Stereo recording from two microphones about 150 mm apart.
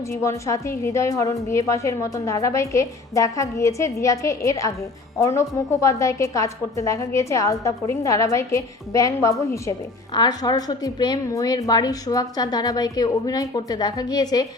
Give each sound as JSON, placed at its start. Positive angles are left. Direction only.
{"t": 0.2, "sound": "a woman's voice", "side_deg": 20}